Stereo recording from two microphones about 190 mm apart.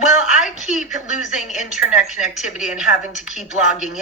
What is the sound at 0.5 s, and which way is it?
Speech, 5° right (ahead or behind).